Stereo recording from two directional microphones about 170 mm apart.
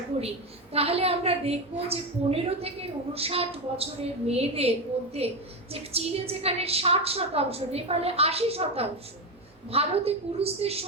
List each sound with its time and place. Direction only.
0.7 s a woman's voice: 35° right (ahead or behind)